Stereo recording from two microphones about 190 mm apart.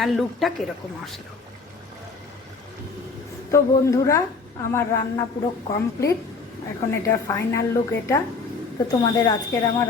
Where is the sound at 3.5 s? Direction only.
15° left (ahead or behind).